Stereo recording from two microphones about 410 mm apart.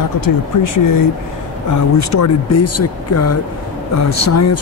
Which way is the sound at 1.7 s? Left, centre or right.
Left.